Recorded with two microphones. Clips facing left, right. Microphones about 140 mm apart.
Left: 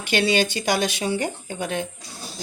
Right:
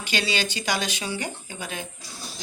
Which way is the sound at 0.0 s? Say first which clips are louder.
Left 7 dB; 55° left (ahead or behind).